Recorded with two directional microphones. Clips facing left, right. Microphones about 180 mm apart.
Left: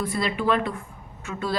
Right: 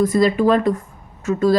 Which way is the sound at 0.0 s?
40° right (ahead or behind).